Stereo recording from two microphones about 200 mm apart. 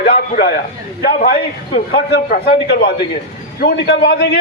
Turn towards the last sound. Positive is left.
turn(degrees=55)  # may be behind; listen again after turning